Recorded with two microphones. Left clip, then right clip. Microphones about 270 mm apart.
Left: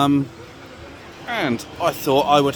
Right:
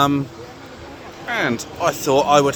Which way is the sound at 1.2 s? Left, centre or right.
Centre.